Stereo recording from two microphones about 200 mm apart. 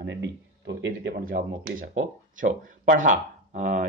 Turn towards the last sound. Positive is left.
turn(degrees=-35)  # may be behind; listen again after turning